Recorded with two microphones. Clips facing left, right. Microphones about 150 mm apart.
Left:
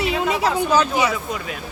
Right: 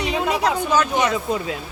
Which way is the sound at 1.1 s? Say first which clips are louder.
Right 4 dB; 25° right (ahead or behind).